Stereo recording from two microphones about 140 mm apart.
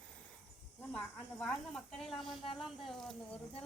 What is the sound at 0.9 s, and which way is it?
Speech, 5° left (ahead or behind).